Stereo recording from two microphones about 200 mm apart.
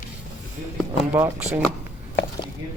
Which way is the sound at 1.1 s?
5° right (ahead or behind).